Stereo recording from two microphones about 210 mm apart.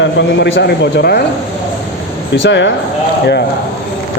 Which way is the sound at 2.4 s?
60° left (ahead or behind).